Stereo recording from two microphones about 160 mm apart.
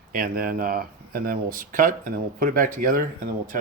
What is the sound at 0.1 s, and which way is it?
Speech, 65° right (ahead or behind).